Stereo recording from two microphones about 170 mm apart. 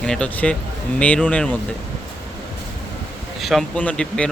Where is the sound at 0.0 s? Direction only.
5° left (ahead or behind).